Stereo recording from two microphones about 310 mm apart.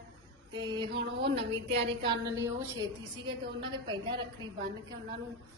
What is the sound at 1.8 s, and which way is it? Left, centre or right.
A woman's voice, centre.